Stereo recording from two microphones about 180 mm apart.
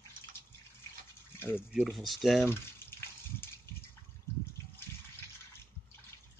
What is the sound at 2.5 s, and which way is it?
Water, 15° left (ahead or behind).